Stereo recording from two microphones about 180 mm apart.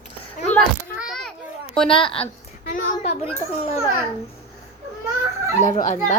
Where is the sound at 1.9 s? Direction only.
30° left (ahead or behind).